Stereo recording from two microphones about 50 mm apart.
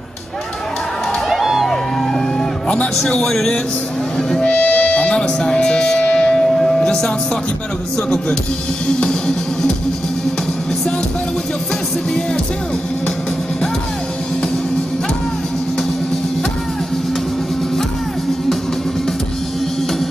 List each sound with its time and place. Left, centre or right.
1.3 s music: centre
3.0 s speech: centre
4.5 s music: left